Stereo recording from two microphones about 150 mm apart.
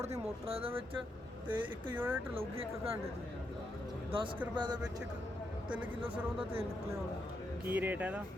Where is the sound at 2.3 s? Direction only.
40° right (ahead or behind).